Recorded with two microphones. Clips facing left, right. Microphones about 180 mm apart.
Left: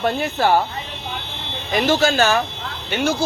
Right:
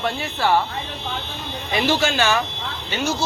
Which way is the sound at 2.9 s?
55° left (ahead or behind).